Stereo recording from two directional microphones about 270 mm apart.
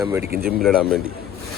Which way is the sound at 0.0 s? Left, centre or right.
Centre.